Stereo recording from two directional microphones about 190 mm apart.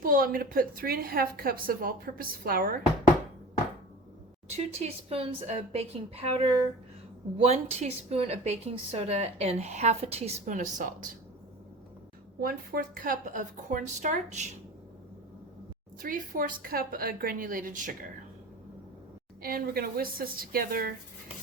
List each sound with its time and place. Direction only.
0.0 s a woman's voice: 50° right (ahead or behind)
4.4 s a woman's voice: 35° right (ahead or behind)
12.4 s a woman's voice: 50° right (ahead or behind)
16.0 s a woman's voice: 45° right (ahead or behind)
19.4 s a woman's voice: 50° right (ahead or behind)